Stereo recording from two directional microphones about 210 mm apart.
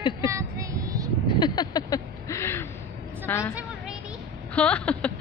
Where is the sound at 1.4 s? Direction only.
20° left (ahead or behind).